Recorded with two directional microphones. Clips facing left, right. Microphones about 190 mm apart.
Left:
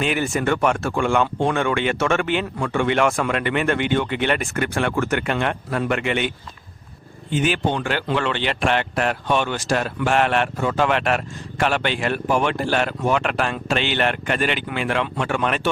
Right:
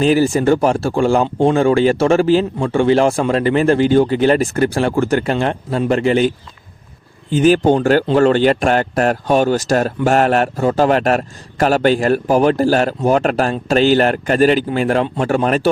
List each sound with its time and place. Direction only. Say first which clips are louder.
0.0 s a man's voice: right 9 dB; 35° right (ahead or behind)